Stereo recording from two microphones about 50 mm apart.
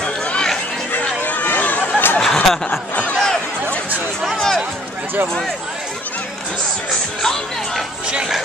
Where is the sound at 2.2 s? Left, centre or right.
Centre.